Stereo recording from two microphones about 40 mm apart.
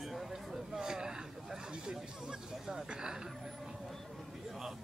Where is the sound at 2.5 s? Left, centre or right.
Centre.